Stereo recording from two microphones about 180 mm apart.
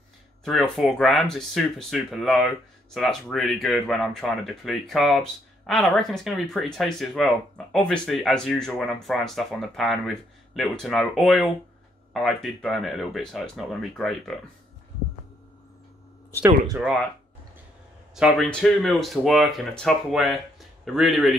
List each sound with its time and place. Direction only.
0.5 s speech: centre (ahead or behind)
16.4 s speech: 15° right (ahead or behind)
18.1 s speech: centre (ahead or behind)